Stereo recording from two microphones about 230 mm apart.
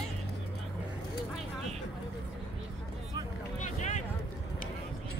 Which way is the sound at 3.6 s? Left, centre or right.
Left.